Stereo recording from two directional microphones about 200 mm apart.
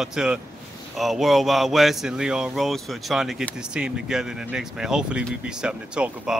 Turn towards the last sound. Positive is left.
turn(degrees=-5)  # may be behind; listen again after turning